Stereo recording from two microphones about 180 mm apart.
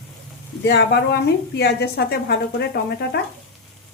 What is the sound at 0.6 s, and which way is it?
Speech, 70° left (ahead or behind).